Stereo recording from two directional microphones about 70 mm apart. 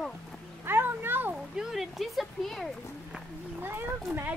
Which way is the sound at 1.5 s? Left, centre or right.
Centre.